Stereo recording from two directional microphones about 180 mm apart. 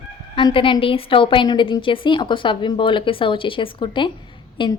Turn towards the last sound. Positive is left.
turn(degrees=25)  # may be behind; listen again after turning